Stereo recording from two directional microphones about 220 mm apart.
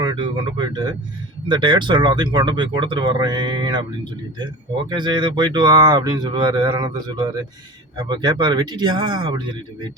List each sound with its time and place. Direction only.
0.0 s speech: 20° right (ahead or behind)
4.9 s speech: 20° right (ahead or behind)